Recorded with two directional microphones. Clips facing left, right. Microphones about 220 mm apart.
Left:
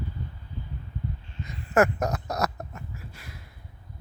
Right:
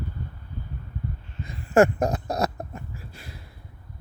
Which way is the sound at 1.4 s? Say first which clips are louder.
Right 4 dB; 30° right (ahead or behind).